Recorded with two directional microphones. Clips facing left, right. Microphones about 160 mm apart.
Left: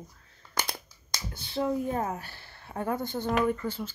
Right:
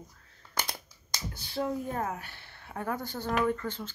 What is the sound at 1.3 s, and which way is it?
Speech, 25° left (ahead or behind).